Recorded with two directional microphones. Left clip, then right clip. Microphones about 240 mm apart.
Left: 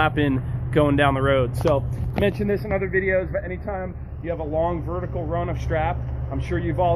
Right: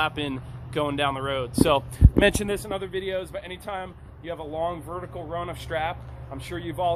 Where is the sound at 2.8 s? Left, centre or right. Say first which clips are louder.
Left 8 dB; right.